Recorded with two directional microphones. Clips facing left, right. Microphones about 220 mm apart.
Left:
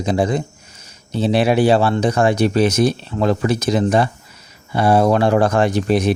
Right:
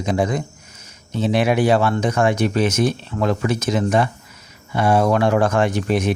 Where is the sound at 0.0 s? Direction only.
35° left (ahead or behind).